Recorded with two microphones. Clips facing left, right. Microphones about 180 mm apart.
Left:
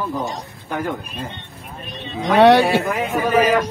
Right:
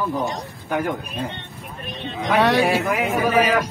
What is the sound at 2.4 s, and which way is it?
Speech, 65° left (ahead or behind).